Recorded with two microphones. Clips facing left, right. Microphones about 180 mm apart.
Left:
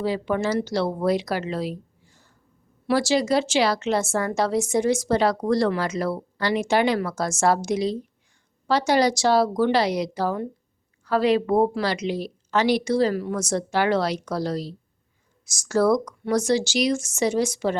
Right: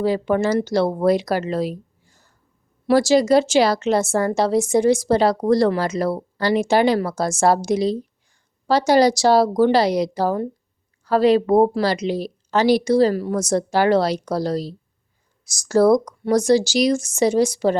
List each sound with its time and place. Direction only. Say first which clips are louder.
0.0 s a woman's voice: right 5 dB; 45° right (ahead or behind)